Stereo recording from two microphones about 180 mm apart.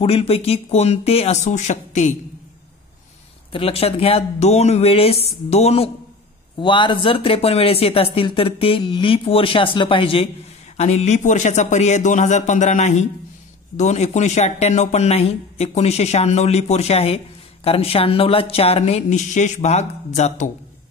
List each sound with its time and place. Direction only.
0.0 s speech: 30° left (ahead or behind)
3.5 s speech: 30° left (ahead or behind)